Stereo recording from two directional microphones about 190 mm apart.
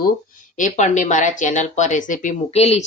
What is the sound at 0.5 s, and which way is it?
Speech, 40° left (ahead or behind).